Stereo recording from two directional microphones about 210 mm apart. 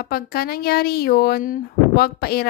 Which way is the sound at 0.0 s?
45° left (ahead or behind).